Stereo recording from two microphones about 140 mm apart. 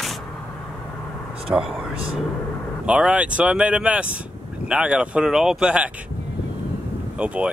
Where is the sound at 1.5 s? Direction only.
20° right (ahead or behind).